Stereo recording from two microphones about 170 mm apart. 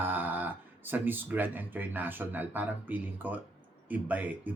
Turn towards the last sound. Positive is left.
turn(degrees=-10)  # may be behind; listen again after turning